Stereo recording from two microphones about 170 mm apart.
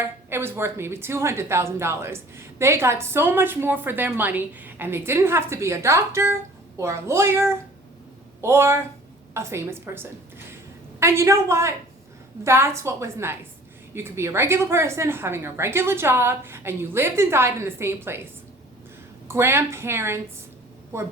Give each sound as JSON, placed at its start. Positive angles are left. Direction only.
{"t": 0.0, "sound": "a woman's voice", "side_deg": -15}
{"t": 19.3, "sound": "a woman's voice", "side_deg": -15}